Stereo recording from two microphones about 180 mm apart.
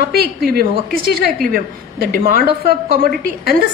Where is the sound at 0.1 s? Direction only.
60° right (ahead or behind).